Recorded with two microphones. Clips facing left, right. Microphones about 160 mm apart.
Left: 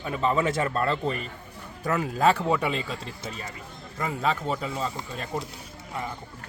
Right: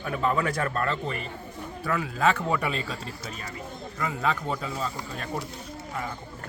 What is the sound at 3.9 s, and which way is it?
Speech, 25° left (ahead or behind).